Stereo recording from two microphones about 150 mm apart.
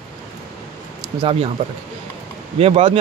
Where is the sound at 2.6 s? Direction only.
40° right (ahead or behind).